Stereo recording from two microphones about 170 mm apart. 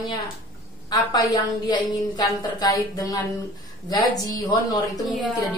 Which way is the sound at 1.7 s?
20° left (ahead or behind).